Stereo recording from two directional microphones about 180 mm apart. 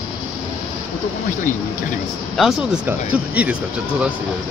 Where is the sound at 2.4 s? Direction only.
5° right (ahead or behind).